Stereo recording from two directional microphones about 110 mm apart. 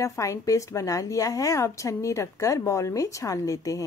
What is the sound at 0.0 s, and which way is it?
A woman's voice, 30° left (ahead or behind).